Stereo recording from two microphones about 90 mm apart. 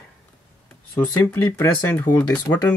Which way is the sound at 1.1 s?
30° left (ahead or behind).